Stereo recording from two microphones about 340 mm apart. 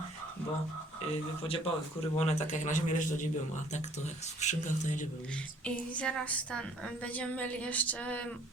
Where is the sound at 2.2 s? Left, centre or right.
Left.